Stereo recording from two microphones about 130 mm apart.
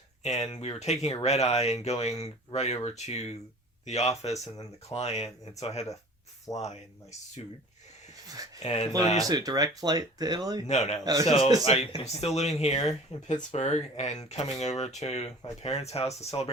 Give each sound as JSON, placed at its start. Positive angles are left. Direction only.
{"t": 0.2, "sound": "speech", "side_deg": 60}
{"t": 6.5, "sound": "speech", "side_deg": 25}
{"t": 8.6, "sound": "speech", "side_deg": 55}
{"t": 9.1, "sound": "speech", "side_deg": -30}
{"t": 10.7, "sound": "speech", "side_deg": 60}
{"t": 11.0, "sound": "a man's voice", "side_deg": -30}
{"t": 11.3, "sound": "a man's voice", "side_deg": 55}